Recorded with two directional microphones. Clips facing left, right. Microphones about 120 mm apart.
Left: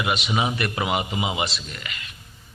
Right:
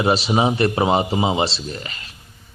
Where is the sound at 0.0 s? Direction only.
35° right (ahead or behind).